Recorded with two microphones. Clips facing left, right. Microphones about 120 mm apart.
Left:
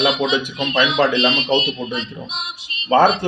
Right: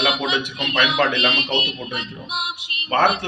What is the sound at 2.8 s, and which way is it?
Speech, 20° left (ahead or behind).